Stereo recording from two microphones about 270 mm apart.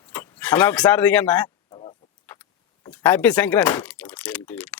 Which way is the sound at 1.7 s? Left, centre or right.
Centre.